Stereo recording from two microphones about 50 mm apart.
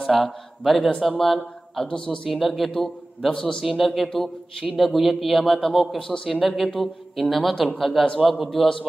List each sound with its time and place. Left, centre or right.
0.0 s a man's voice: centre
1.9 s speech: centre
2.2 s speech: centre
3.6 s speech: centre
4.1 s speech: centre
4.7 s speech: centre
5.4 s speech: centre